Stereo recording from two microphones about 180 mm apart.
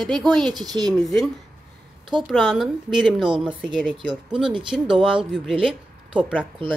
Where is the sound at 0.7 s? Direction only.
25° right (ahead or behind).